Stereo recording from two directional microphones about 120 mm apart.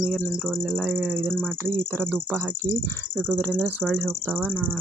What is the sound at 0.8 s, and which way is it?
Speech, 10° right (ahead or behind).